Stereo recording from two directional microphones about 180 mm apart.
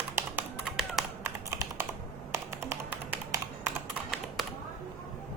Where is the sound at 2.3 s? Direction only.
15° right (ahead or behind).